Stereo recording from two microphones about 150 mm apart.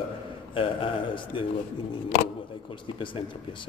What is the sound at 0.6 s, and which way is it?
Speech, 35° left (ahead or behind).